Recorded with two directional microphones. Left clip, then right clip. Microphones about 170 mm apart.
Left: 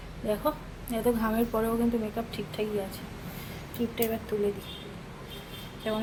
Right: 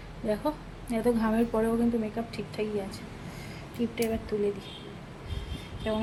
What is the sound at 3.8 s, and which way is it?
Speech, 15° right (ahead or behind).